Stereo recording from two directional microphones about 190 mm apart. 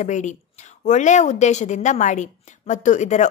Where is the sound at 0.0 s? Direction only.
40° left (ahead or behind).